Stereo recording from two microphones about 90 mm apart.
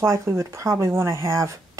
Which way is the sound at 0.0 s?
30° right (ahead or behind).